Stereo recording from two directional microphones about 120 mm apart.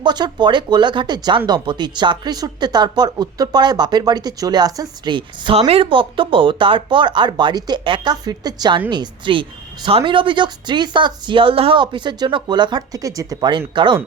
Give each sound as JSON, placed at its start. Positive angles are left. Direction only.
{"t": 0.0, "sound": "a woman's voice", "side_deg": -40}